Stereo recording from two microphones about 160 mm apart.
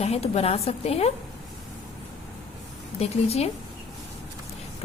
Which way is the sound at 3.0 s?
40° left (ahead or behind).